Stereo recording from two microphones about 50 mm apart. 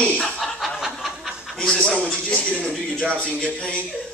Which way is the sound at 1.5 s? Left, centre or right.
Centre.